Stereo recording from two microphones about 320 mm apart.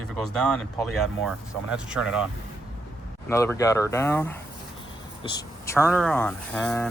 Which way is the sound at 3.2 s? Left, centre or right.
Centre.